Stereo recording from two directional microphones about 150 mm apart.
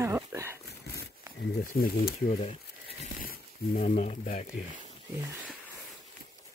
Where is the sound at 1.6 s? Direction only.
80° left.